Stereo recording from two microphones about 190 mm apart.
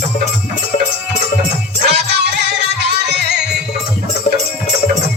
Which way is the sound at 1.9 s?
65° right (ahead or behind).